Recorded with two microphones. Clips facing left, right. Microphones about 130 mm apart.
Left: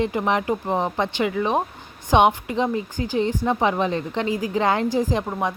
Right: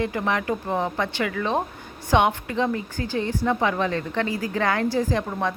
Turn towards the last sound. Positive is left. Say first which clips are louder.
# left 1 dB
turn(degrees=15)  # may be behind; listen again after turning